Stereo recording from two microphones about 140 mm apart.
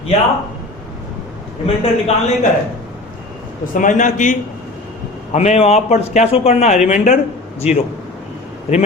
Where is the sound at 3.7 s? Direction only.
65° left (ahead or behind).